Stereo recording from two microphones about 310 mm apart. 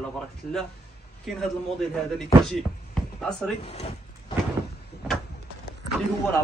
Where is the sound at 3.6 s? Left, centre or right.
Centre.